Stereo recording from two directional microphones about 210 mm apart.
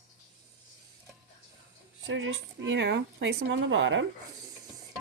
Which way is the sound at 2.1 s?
60° right (ahead or behind).